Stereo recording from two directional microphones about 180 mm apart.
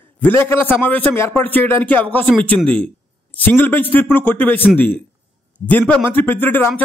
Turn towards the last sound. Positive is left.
turn(degrees=10)  # may be behind; listen again after turning